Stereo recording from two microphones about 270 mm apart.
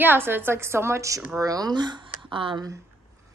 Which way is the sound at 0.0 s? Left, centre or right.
Centre.